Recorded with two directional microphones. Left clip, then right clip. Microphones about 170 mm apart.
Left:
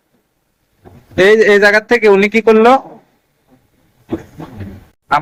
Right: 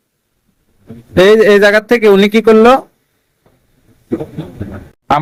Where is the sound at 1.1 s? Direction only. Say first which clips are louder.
Right 2 dB; 90° right; by 2.8 s 70° right (ahead or behind).